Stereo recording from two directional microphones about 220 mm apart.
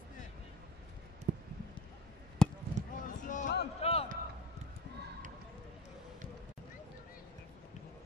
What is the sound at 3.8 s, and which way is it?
Basketball bounce, 25° left (ahead or behind).